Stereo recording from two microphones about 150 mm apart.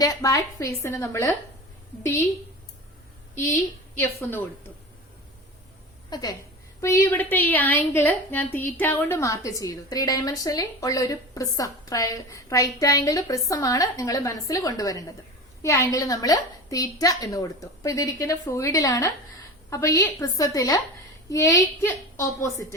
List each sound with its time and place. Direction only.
0.0 s a woman's voice: 25° left (ahead or behind)
3.3 s a woman's voice: 15° left (ahead or behind)
6.1 s a woman's voice: 30° left (ahead or behind)
6.8 s a woman's voice: 15° left (ahead or behind)